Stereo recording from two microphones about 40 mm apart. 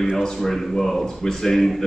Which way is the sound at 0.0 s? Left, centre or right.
Centre.